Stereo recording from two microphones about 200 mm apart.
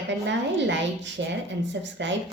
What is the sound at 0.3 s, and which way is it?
A woman's voice, 65° right (ahead or behind).